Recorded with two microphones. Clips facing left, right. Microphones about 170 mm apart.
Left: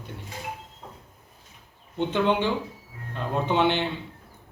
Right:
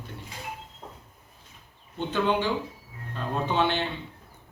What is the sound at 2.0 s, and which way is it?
A man's voice, 20° left (ahead or behind).